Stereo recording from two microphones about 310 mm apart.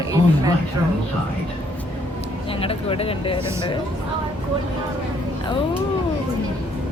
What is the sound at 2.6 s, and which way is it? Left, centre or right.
Speech, centre.